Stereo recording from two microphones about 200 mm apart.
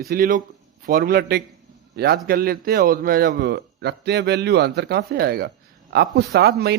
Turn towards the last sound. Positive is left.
turn(degrees=-55)  # may be behind; listen again after turning